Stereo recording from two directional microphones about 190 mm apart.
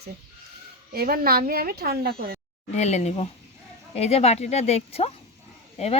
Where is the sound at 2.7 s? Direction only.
35° left (ahead or behind).